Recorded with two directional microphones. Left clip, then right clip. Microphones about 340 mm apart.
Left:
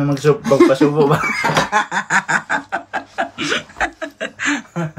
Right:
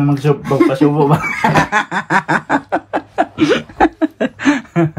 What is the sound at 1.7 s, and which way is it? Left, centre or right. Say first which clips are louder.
Snicker: right 2 dB; centre.